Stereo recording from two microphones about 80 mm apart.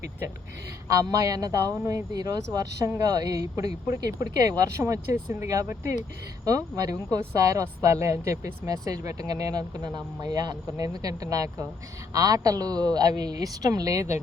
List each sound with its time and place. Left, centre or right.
0.9 s speech: right